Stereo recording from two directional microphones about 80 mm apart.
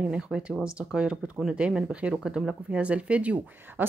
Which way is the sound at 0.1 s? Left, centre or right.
Centre.